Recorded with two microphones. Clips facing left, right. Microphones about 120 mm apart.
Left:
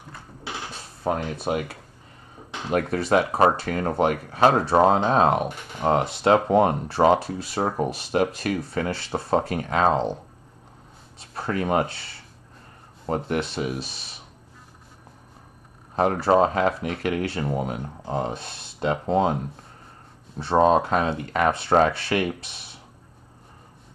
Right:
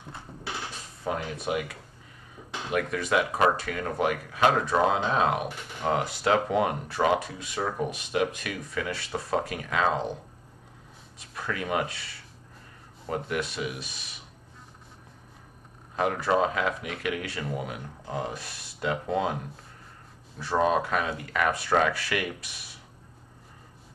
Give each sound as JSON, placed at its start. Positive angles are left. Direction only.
{"t": 1.3, "sound": "speech", "side_deg": 35}
{"t": 11.1, "sound": "speech", "side_deg": 35}
{"t": 16.0, "sound": "speech", "side_deg": 35}